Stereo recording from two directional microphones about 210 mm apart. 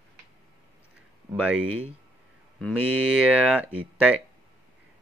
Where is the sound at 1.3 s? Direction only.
5° right (ahead or behind).